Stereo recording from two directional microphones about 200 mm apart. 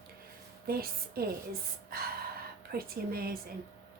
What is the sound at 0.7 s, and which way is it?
Speech, 50° right (ahead or behind).